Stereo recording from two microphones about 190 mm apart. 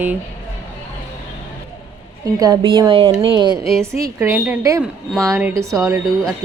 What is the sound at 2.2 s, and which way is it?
A woman's voice, 20° right (ahead or behind).